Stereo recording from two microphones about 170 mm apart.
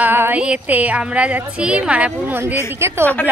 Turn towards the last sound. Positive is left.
turn(degrees=10)  # may be behind; listen again after turning